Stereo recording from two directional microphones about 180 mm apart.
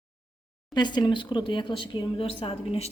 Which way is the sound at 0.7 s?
25° left (ahead or behind).